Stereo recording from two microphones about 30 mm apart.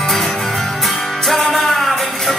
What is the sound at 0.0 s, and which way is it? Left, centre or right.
Music, centre.